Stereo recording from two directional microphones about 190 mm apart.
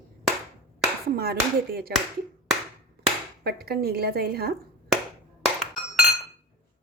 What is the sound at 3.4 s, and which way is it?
A woman's voice, 55° right (ahead or behind).